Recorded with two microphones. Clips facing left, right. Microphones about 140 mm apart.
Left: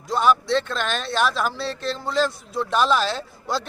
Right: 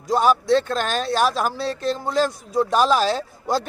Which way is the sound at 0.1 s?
40° right (ahead or behind).